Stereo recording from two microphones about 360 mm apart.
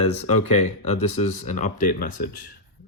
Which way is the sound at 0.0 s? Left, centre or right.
Centre.